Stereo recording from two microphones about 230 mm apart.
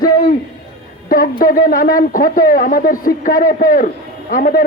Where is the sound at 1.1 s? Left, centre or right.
Left.